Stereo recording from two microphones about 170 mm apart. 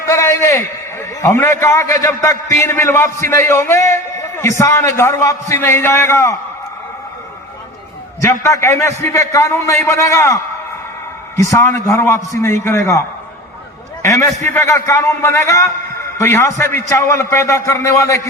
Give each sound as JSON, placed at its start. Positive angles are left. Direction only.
{"t": 0.0, "sound": "a sound", "side_deg": 15}
{"t": 0.9, "sound": "a man's voice", "side_deg": 15}
{"t": 8.2, "sound": "a man's voice", "side_deg": 15}
{"t": 11.4, "sound": "a man's voice", "side_deg": 15}
{"t": 14.0, "sound": "a man's voice", "side_deg": 15}